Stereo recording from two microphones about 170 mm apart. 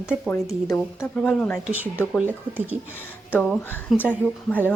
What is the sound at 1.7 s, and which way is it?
Speech, 10° right (ahead or behind).